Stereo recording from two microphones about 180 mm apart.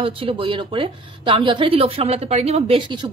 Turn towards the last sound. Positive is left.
turn(degrees=-25)  # may be behind; listen again after turning